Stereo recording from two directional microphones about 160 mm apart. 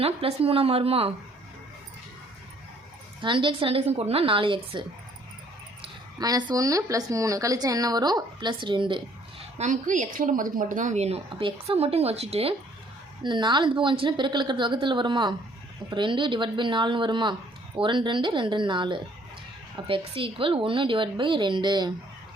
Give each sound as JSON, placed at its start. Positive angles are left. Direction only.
{"t": 0.0, "sound": "a woman's voice", "side_deg": -40}
{"t": 3.2, "sound": "a woman's voice", "side_deg": -30}
{"t": 9.6, "sound": "a woman's voice", "side_deg": -50}
{"t": 13.2, "sound": "a woman's voice", "side_deg": -30}